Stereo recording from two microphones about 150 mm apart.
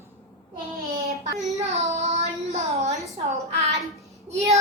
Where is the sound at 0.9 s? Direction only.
90° right.